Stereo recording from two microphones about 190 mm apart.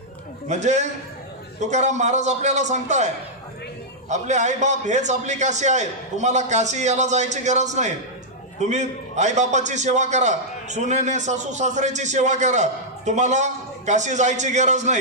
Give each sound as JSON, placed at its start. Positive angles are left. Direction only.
{"t": 0.4, "sound": "a man's voice", "side_deg": -40}
{"t": 4.1, "sound": "a man's voice", "side_deg": -40}